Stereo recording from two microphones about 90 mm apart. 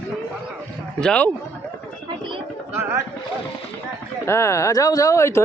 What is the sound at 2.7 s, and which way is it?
Speech, 25° right (ahead or behind).